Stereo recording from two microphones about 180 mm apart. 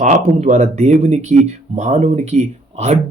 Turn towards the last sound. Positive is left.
turn(degrees=-40)  # may be behind; listen again after turning